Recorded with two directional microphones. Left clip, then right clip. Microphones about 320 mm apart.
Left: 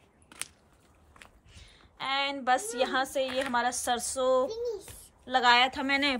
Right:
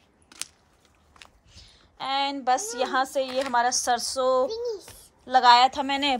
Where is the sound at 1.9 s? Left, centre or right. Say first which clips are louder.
Right 4 dB; centre.